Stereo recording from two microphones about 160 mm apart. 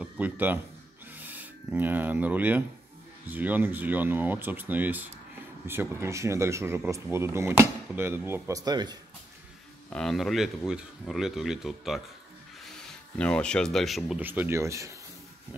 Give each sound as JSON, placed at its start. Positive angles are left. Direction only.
{"t": 0.0, "sound": "a man's voice", "side_deg": -10}
{"t": 9.8, "sound": "speech", "side_deg": 5}
{"t": 13.2, "sound": "speech", "side_deg": 5}